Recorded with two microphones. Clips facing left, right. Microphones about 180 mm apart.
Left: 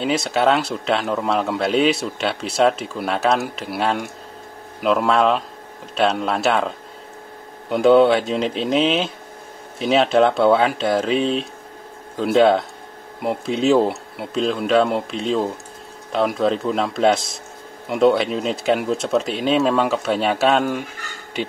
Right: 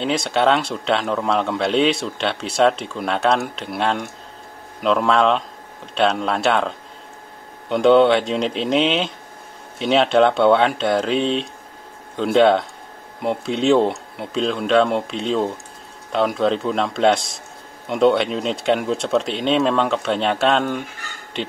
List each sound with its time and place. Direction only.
0.0 s a man's voice: 5° left (ahead or behind)
7.7 s a man's voice: centre (ahead or behind)